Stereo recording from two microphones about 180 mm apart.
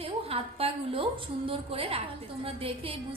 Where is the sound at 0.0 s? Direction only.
30° right (ahead or behind).